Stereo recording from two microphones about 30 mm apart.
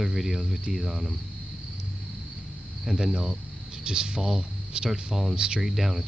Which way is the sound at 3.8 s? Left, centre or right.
Right.